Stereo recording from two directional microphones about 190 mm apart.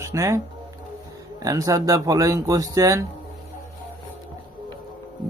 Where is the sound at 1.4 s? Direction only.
15° right (ahead or behind).